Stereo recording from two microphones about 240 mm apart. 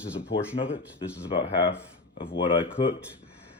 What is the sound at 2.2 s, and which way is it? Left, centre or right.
Speech, left.